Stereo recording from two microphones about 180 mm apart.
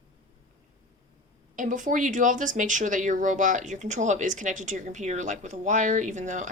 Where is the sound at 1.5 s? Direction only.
45° right (ahead or behind).